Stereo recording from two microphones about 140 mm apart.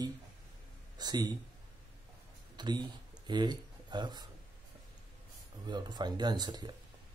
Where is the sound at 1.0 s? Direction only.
30° right (ahead or behind).